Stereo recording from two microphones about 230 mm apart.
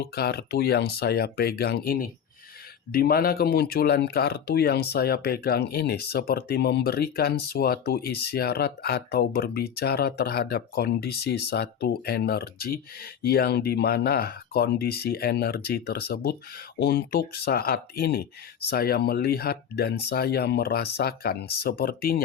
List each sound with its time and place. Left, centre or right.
0.0 s speech: left